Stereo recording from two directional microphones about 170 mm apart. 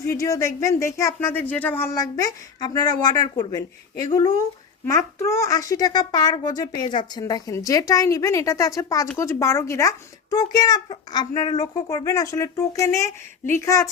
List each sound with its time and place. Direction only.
0.0 s speech: 20° left (ahead or behind)